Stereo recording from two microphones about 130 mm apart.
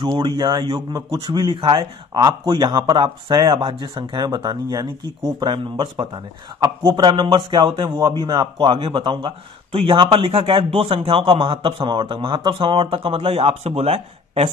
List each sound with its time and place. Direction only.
0.0 s speech: 40° right (ahead or behind)